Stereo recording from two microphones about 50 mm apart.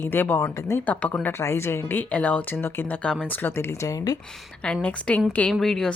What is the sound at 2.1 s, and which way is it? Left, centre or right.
Speech, left.